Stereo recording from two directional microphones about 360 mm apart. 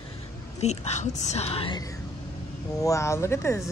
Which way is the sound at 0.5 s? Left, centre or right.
Centre.